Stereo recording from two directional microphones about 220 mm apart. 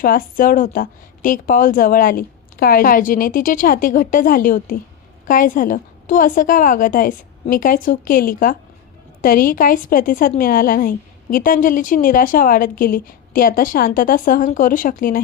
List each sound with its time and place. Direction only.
0.0 s a woman's voice: 40° left (ahead or behind)